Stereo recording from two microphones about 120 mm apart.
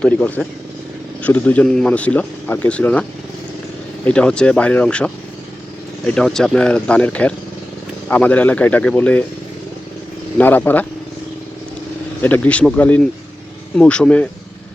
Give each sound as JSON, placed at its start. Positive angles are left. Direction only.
{"t": 0.0, "sound": "speech", "side_deg": 10}
{"t": 10.3, "sound": "speech", "side_deg": 15}
{"t": 12.2, "sound": "speech", "side_deg": 15}